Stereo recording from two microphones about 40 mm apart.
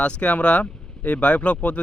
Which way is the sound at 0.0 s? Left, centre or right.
Left.